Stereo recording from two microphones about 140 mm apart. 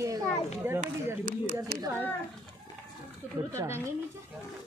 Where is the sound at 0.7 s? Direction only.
60° right (ahead or behind).